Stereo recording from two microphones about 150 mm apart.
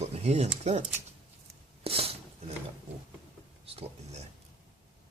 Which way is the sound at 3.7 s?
45° right (ahead or behind).